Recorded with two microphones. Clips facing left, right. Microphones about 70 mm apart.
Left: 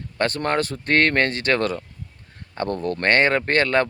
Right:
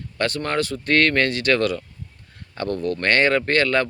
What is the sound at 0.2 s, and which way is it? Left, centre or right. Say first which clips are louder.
Speech: left 1 dB; left.